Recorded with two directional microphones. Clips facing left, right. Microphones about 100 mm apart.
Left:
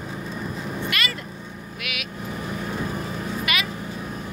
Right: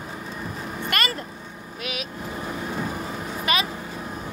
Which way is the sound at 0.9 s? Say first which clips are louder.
Right 2 dB; 40° right (ahead or behind).